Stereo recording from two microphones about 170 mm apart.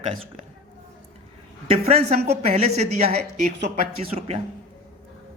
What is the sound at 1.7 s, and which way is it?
A man's voice, 40° right (ahead or behind).